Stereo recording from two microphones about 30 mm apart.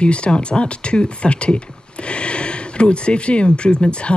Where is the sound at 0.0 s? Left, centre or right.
Left.